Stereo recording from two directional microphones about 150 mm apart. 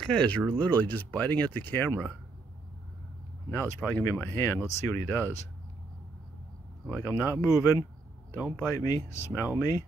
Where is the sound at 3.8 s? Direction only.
15° left (ahead or behind).